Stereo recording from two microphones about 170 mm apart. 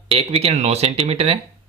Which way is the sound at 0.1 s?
35° right (ahead or behind).